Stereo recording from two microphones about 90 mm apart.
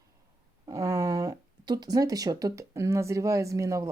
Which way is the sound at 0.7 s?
35° right (ahead or behind).